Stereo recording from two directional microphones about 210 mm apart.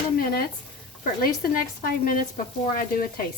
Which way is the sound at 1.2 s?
45° left (ahead or behind).